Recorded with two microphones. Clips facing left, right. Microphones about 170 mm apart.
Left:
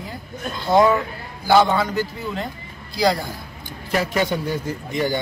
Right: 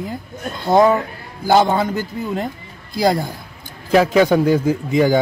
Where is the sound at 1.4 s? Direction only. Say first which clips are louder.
Right 2 dB; 45° right (ahead or behind).